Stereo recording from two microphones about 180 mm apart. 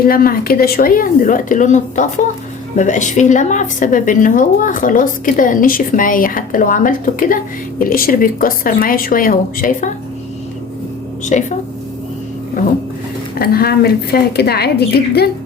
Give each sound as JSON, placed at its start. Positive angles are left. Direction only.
{"t": 0.0, "sound": "a woman's voice", "side_deg": 55}
{"t": 11.3, "sound": "a woman's voice", "side_deg": 40}
{"t": 13.4, "sound": "a woman's voice", "side_deg": 60}